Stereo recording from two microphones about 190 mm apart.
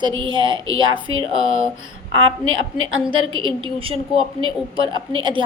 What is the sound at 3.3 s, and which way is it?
Speech, 25° right (ahead or behind).